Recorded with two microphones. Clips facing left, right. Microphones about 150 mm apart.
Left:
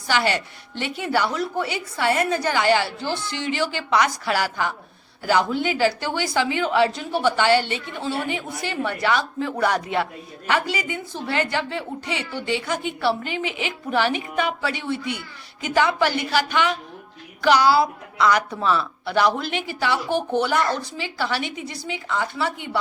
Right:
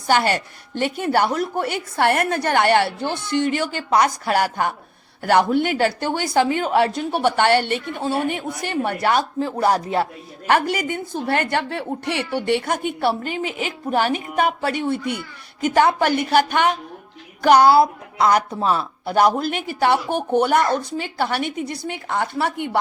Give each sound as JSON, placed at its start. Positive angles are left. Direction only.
{"t": 0.1, "sound": "a woman's voice", "side_deg": -45}
{"t": 10.4, "sound": "a woman's voice", "side_deg": -50}